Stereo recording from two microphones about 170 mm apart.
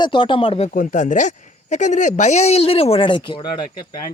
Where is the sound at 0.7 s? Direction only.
50° left (ahead or behind); by 3.5 s 30° left (ahead or behind).